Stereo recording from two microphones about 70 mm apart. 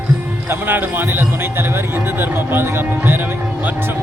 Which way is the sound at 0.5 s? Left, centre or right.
Right.